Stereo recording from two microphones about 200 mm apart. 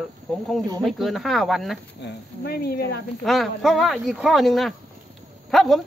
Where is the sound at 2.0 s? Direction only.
50° left (ahead or behind).